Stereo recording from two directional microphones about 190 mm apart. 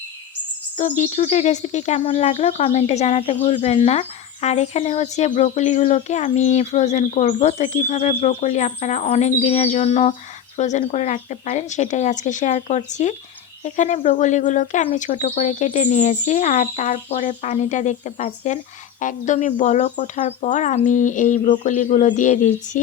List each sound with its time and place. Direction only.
0.8 s speech: 40° left (ahead or behind)